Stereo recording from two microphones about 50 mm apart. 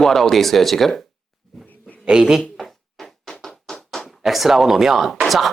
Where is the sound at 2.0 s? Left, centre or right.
Centre.